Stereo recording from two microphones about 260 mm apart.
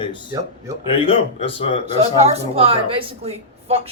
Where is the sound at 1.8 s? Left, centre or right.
Right.